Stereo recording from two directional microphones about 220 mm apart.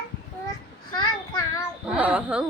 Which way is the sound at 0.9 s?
20° left (ahead or behind).